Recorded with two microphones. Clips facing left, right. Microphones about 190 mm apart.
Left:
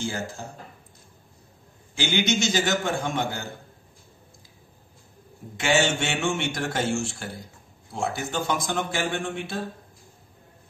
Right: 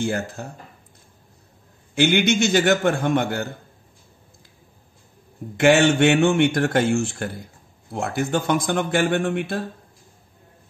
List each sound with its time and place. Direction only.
0.0 s a man's voice: 60° right (ahead or behind)
2.0 s a man's voice: 60° right (ahead or behind)
5.6 s a man's voice: 55° right (ahead or behind)